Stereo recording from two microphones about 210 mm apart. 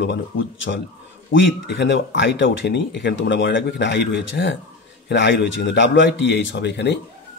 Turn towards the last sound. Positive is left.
turn(degrees=55)  # may be behind; listen again after turning